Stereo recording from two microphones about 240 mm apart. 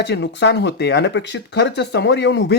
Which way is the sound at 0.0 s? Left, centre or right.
Left.